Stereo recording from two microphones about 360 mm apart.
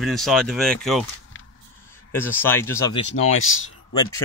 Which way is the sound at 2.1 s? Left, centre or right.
Centre.